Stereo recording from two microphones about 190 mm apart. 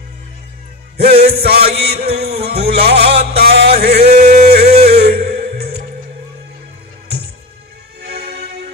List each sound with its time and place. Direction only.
1.2 s music: 55° right (ahead or behind)
3.0 s music: 30° right (ahead or behind)
3.3 s a sound: 55° right (ahead or behind)
8.0 s music: 55° right (ahead or behind)